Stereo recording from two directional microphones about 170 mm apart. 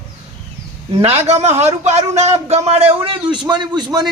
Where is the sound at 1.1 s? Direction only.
40° right (ahead or behind).